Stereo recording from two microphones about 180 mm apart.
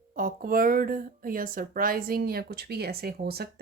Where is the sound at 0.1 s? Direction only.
50° right (ahead or behind).